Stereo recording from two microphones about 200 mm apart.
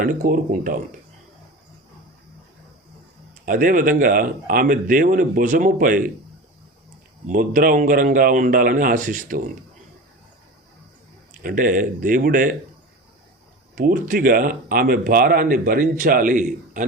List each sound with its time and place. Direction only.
0.0 s speech: 45° right (ahead or behind)
3.4 s speech: 45° right (ahead or behind)
7.3 s speech: 40° right (ahead or behind)
11.4 s speech: 45° right (ahead or behind)
13.7 s speech: 45° right (ahead or behind)